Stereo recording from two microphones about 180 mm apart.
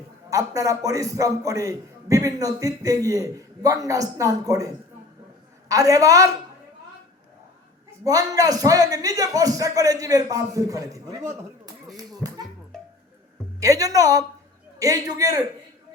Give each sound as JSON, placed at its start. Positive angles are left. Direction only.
{"t": 0.3, "sound": "a man's voice", "side_deg": -20}
{"t": 8.0, "sound": "a man's voice", "side_deg": -20}
{"t": 11.9, "sound": "a sound", "side_deg": -20}
{"t": 13.6, "sound": "a man's voice", "side_deg": -20}